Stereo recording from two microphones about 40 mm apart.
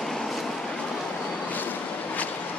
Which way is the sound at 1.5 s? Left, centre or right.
Left.